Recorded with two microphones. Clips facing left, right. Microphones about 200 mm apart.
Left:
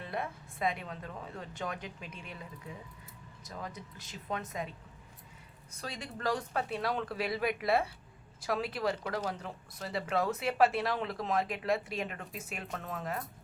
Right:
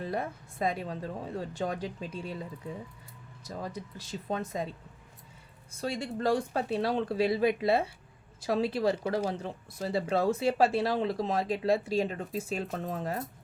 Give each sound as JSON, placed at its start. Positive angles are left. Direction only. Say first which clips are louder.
{"t": 0.0, "sound": "speech", "louder": "right 4 dB", "side_deg": -35}
{"t": 5.8, "sound": "speech", "louder": "right 6 dB", "side_deg": -30}